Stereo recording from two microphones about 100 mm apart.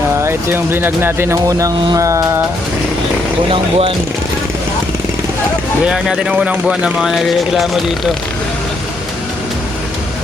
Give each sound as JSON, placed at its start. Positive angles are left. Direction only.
{"t": 0.2, "sound": "speech", "side_deg": -25}
{"t": 1.5, "sound": "speech", "side_deg": -35}
{"t": 3.5, "sound": "speech", "side_deg": -60}
{"t": 5.9, "sound": "speech", "side_deg": -5}